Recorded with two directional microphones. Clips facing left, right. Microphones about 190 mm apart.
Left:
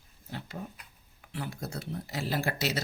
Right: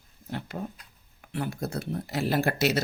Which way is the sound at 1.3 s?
55° right (ahead or behind).